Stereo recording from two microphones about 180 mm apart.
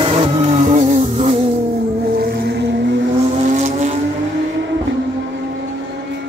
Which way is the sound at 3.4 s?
40° right (ahead or behind).